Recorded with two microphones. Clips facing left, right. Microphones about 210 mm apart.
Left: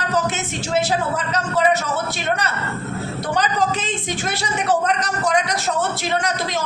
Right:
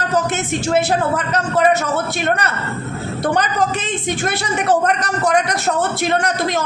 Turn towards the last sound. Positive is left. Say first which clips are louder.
# right 3 dB
turn(degrees=-55)  # may be behind; listen again after turning